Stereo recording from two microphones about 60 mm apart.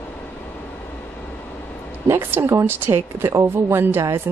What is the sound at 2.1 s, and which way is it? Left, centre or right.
Speech, right.